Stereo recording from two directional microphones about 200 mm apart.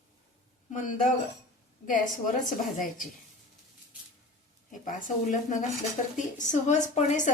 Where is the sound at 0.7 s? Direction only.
40° left (ahead or behind).